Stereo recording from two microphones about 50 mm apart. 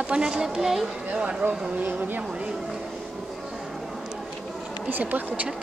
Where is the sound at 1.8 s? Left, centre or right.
Right.